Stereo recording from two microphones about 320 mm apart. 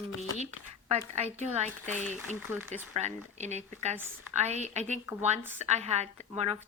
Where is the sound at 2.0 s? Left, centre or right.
Centre.